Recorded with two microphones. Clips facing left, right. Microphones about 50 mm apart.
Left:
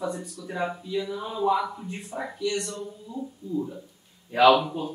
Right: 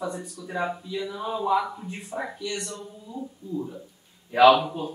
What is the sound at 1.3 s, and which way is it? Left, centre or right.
Speech, centre.